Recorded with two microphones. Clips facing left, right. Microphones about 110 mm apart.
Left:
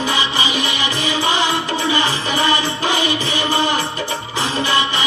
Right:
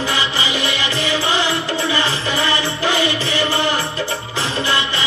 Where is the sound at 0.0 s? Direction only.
20° left (ahead or behind).